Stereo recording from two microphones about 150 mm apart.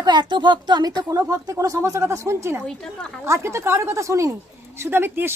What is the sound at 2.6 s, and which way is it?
Speech, 5° left (ahead or behind).